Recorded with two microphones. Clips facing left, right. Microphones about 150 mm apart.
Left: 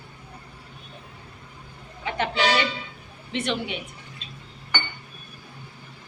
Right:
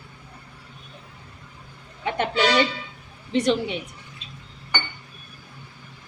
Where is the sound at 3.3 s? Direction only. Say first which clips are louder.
Right 7 dB; 40° right (ahead or behind).